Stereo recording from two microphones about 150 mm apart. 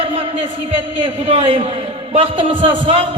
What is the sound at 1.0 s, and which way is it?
A man's voice, 45° right (ahead or behind).